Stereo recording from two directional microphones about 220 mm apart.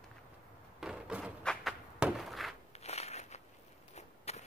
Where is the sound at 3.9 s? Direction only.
30° left (ahead or behind).